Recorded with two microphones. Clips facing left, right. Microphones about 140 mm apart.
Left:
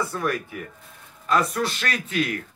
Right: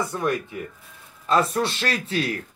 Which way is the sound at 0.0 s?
20° right (ahead or behind).